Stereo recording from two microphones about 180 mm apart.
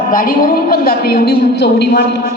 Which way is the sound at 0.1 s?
50° left (ahead or behind).